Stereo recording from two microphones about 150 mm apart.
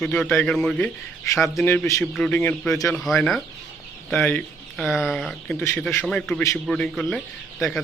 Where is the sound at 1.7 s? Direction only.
15° left (ahead or behind).